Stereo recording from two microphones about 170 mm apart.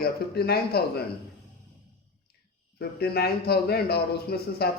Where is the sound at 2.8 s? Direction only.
65° left (ahead or behind).